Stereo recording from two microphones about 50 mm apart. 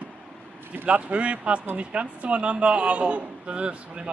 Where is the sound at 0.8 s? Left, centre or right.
Right.